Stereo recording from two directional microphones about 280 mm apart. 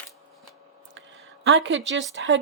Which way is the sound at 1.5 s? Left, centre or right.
Right.